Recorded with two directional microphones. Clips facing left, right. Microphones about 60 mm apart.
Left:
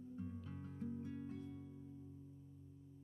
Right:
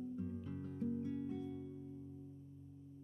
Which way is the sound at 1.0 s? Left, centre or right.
Centre.